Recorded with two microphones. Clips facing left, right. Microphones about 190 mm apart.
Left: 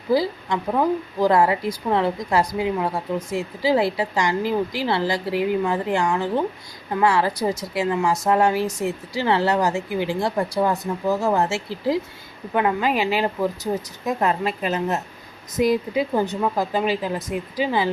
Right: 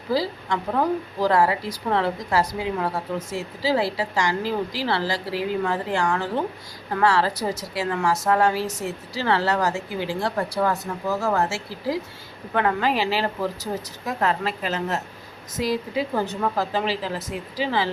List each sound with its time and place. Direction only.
0.1 s a woman's voice: 15° left (ahead or behind)